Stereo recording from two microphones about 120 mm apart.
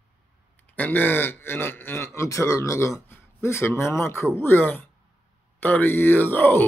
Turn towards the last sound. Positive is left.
turn(degrees=20)  # may be behind; listen again after turning